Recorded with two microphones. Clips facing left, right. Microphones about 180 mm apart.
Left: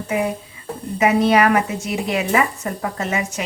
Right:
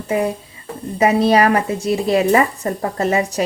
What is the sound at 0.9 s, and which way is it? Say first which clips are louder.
A woman's voice: right 2 dB; 35° right (ahead or behind).